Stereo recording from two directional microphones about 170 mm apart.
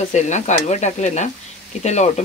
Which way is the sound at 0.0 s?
45° left (ahead or behind).